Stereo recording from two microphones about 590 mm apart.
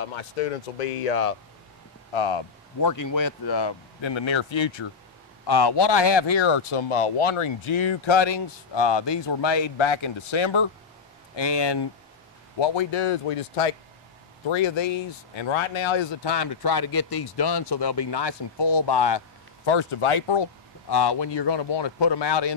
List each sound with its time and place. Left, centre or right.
0.8 s speech: left
2.1 s speech: left
2.8 s speech: left
14.5 s speech: left
20.9 s speech: left